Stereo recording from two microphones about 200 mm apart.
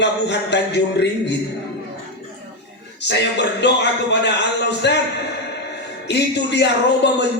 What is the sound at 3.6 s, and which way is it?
Speech, 60° left (ahead or behind).